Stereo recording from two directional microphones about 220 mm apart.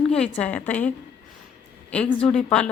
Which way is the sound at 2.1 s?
5° left (ahead or behind).